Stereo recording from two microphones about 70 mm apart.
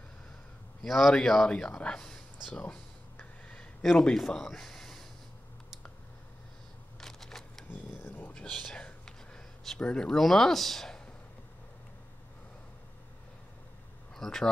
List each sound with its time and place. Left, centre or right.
0.8 s speech: centre
2.5 s a sound: centre
3.8 s speech: centre
7.0 s typewriter: centre
8.0 s a sound: left
8.4 s whispering: centre
14.1 s speech: centre